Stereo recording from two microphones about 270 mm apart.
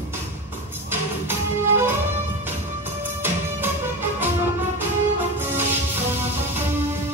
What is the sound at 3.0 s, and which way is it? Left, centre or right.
Music, centre.